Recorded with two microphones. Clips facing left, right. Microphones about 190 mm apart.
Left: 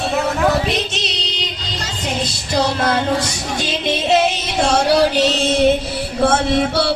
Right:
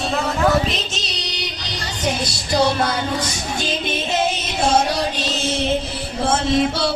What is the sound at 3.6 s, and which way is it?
Music, 75° left (ahead or behind).